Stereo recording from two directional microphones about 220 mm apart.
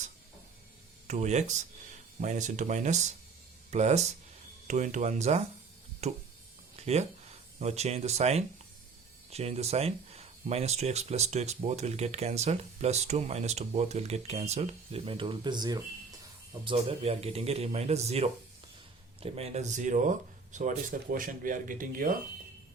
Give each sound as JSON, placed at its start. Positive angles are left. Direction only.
{"t": 1.0, "sound": "speech", "side_deg": -30}
{"t": 6.7, "sound": "a sound", "side_deg": -30}
{"t": 7.6, "sound": "speech", "side_deg": -30}